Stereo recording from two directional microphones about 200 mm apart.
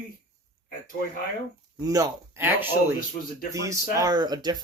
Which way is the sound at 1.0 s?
50° left (ahead or behind).